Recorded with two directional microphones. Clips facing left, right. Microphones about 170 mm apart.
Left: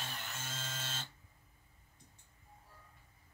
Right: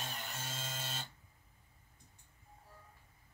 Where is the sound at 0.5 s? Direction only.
15° right (ahead or behind).